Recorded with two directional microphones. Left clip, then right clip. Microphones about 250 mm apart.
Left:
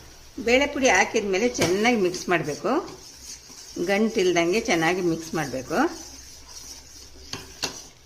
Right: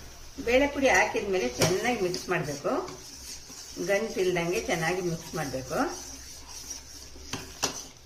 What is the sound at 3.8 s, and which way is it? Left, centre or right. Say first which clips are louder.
A woman's voice: left 4 dB; left.